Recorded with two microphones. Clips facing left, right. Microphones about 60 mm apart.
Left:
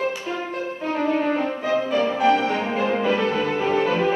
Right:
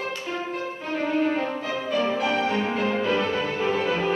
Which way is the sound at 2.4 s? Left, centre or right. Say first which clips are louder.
Left 2 dB; centre.